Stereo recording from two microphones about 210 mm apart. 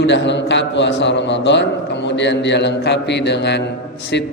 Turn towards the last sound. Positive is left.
turn(degrees=55)  # may be behind; listen again after turning